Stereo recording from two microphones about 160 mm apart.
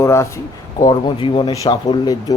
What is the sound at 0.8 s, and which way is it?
Speech, 30° left (ahead or behind).